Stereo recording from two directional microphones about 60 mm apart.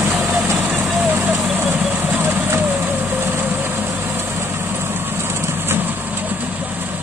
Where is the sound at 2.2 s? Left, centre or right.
Right.